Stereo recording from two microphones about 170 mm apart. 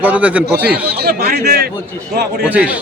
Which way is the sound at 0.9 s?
65° right (ahead or behind).